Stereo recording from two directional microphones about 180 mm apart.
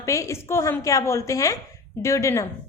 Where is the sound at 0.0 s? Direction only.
15° left (ahead or behind).